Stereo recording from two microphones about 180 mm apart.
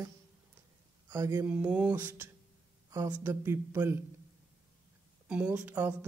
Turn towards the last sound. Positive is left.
turn(degrees=-10)  # may be behind; listen again after turning